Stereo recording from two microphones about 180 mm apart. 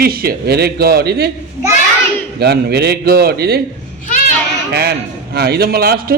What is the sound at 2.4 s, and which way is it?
A man's voice, 65° right (ahead or behind).